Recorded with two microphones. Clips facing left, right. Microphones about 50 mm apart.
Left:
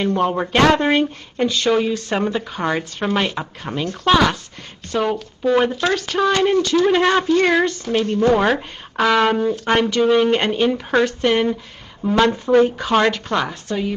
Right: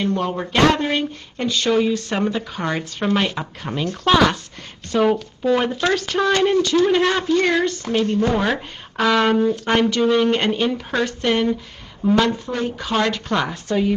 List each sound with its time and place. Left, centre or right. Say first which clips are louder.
0.1 s speech: left 3 dB; centre
0.9 s speech: left 5 dB; centre
7.0 s speech: left 3 dB; left
7.3 s speech: even; centre
8.1 s speech: left 6 dB; left
9.1 s speech: even; centre
11.0 s speech: left 6 dB; left
11.2 s speech: left 2 dB; centre
12.4 s speech: left 9 dB; left
13.3 s speech: even; centre